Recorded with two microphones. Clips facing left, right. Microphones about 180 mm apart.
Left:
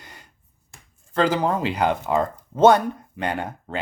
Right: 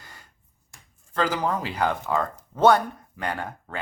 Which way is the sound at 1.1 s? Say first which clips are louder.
Left 4 dB; 25° left (ahead or behind).